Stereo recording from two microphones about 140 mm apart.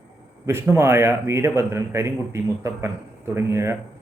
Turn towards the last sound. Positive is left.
turn(degrees=-20)  # may be behind; listen again after turning